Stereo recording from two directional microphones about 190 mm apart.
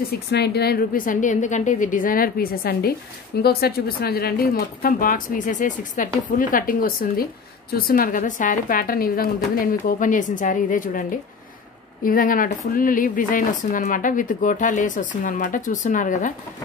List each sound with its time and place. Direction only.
0.3 s speech: 60° left (ahead or behind); by 16.3 s 40° left (ahead or behind)